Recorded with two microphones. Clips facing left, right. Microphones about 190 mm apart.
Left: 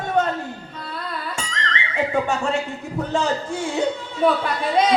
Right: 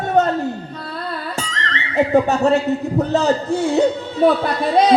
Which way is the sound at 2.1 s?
40° right (ahead or behind).